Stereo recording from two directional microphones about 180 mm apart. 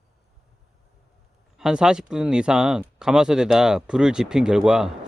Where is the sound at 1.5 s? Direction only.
5° right (ahead or behind).